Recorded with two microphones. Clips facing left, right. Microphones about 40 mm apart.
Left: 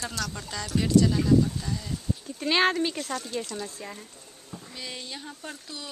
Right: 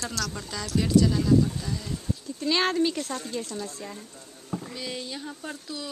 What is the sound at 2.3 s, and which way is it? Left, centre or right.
Speech, left.